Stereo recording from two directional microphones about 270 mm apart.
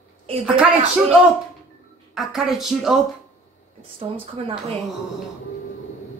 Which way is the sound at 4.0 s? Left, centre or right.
Right.